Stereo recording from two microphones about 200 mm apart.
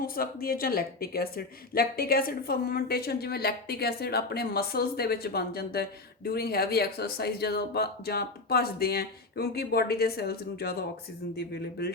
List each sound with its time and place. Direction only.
0.2 s speech: 50° left (ahead or behind)